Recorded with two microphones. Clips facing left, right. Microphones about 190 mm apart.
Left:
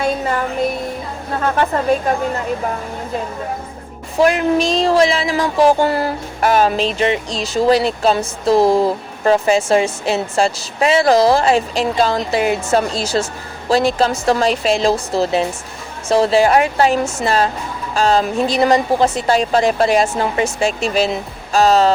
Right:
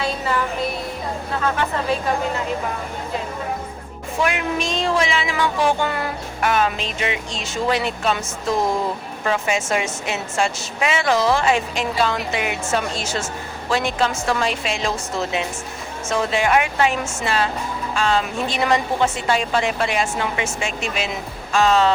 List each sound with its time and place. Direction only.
0.0 s music: 45° left (ahead or behind)
1.4 s speech: 45° left (ahead or behind)
4.2 s a sound: 35° left (ahead or behind)